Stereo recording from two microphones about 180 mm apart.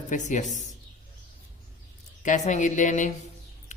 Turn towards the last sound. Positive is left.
turn(degrees=45)  # may be behind; listen again after turning